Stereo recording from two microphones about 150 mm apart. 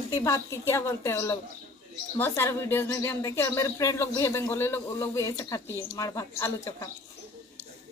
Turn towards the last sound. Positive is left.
turn(degrees=20)  # may be behind; listen again after turning